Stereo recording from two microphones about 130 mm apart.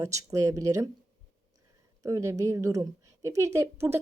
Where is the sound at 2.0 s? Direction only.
25° right (ahead or behind).